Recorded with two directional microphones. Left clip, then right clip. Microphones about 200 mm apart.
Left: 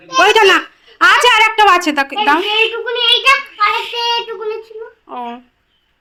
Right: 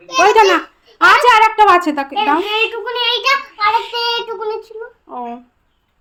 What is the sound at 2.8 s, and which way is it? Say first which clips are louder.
Speech: left 2 dB; 35° right (ahead or behind).